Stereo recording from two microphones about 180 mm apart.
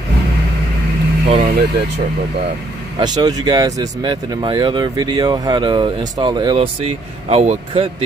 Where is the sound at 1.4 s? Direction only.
60° right (ahead or behind).